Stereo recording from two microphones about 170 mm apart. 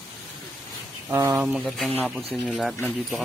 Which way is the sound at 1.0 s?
15° right (ahead or behind).